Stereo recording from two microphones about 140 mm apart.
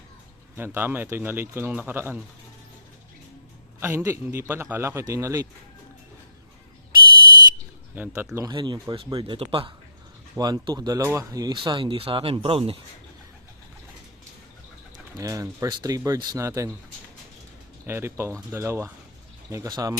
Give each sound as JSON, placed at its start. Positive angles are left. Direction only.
{"t": 0.5, "sound": "speech", "side_deg": -15}
{"t": 3.8, "sound": "a man's voice", "side_deg": -15}
{"t": 7.9, "sound": "speech", "side_deg": -15}
{"t": 8.4, "sound": "speech", "side_deg": -30}
{"t": 10.3, "sound": "speech", "side_deg": -30}
{"t": 15.2, "sound": "a man's voice", "side_deg": -25}
{"t": 17.8, "sound": "a man's voice", "side_deg": -15}